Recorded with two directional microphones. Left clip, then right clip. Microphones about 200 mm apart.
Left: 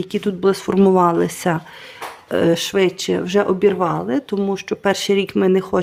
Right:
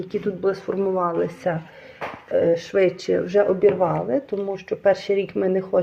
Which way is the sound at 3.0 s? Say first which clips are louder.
Left 1 dB; 30° left (ahead or behind).